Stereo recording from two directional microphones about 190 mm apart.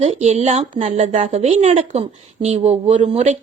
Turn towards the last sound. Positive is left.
turn(degrees=-35)  # may be behind; listen again after turning